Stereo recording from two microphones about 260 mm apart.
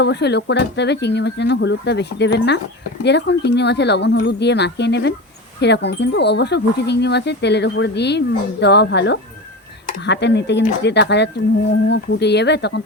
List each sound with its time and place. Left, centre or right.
0.0 s speech: left